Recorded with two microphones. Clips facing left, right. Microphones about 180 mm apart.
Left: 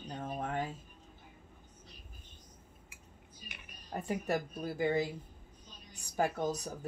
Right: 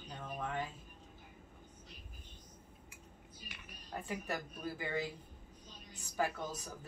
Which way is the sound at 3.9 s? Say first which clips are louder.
Left 7 dB; 45° left (ahead or behind).